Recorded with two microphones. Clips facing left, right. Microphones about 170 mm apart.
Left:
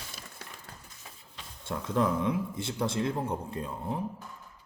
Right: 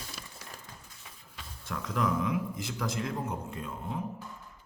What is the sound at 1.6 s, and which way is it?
A man's voice, 30° left (ahead or behind).